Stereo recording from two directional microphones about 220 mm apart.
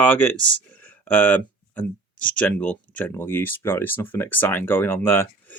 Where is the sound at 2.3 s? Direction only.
5° left (ahead or behind).